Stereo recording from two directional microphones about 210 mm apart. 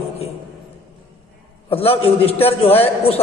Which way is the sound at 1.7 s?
25° left (ahead or behind).